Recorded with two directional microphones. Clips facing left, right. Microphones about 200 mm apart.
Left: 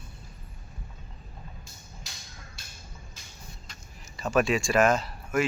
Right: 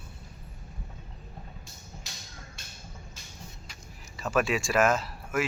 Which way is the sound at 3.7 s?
Centre (ahead or behind).